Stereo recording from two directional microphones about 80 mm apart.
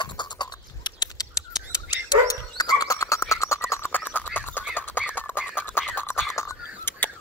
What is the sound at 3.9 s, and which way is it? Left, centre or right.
Frog, left.